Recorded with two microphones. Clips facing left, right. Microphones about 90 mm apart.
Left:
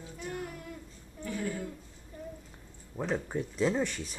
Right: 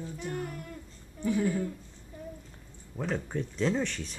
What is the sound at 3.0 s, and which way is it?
Speech, 5° left (ahead or behind).